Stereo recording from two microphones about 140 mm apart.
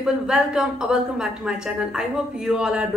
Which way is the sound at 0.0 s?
5° right (ahead or behind).